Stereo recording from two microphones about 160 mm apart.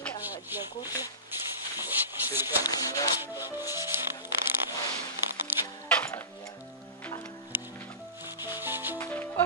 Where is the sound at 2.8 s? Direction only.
20° left (ahead or behind).